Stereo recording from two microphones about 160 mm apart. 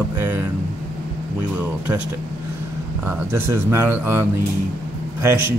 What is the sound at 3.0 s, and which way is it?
Speech, 15° right (ahead or behind).